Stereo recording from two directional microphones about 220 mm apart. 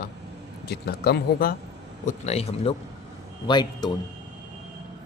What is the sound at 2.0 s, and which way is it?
Speech, 30° left (ahead or behind).